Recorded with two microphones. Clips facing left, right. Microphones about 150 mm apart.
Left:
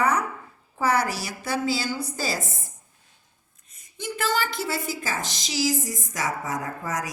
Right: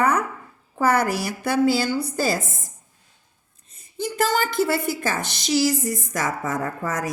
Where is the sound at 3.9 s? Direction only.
35° right (ahead or behind).